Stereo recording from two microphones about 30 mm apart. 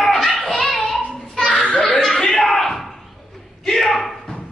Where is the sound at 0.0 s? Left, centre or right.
Centre.